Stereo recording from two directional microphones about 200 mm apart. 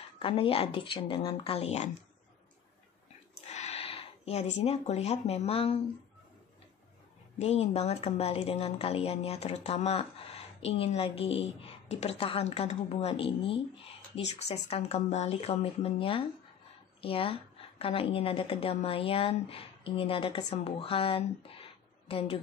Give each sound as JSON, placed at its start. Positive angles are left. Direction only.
{"t": 0.2, "sound": "a woman's voice", "side_deg": 25}
{"t": 3.3, "sound": "speech", "side_deg": 35}
{"t": 7.3, "sound": "a woman's voice", "side_deg": 30}